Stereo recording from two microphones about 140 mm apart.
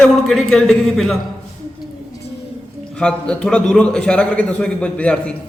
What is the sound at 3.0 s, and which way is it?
A man's voice, 5° left (ahead or behind).